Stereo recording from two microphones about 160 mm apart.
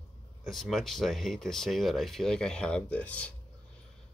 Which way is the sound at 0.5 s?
Centre (ahead or behind).